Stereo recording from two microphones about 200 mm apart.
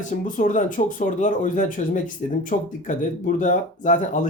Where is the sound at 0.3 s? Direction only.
40° left (ahead or behind).